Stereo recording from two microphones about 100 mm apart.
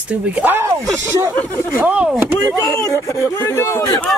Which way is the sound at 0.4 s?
20° right (ahead or behind).